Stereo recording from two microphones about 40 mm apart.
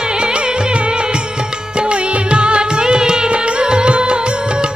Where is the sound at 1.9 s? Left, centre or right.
Right.